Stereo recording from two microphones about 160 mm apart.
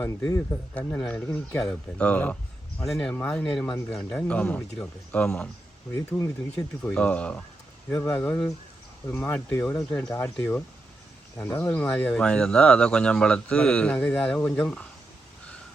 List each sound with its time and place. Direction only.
0.0 s speech: 15° left (ahead or behind)
6.1 s speech: 20° left (ahead or behind)
6.9 s speech: 5° left (ahead or behind)